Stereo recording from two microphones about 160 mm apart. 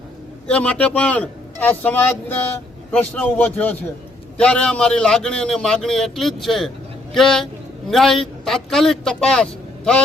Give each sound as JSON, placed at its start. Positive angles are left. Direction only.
{"t": 0.4, "sound": "a man's voice", "side_deg": 10}